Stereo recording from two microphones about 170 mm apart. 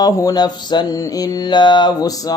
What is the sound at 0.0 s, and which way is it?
Mantra, 20° left (ahead or behind).